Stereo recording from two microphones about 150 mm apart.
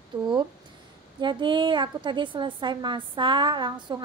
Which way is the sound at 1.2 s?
30° right (ahead or behind).